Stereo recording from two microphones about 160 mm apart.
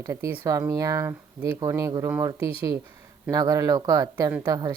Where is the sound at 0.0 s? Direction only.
20° right (ahead or behind).